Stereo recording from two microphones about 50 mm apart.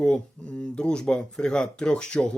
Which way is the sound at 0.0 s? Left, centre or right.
Centre.